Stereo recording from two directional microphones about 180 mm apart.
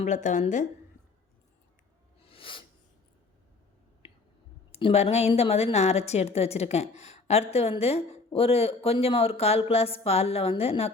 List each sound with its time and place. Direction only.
0.0 s a woman's voice: 40° left (ahead or behind)
2.2 s a sound: 30° left (ahead or behind)
4.7 s a woman's voice: 35° left (ahead or behind)